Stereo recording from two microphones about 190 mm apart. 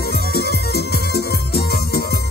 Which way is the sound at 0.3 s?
55° left (ahead or behind).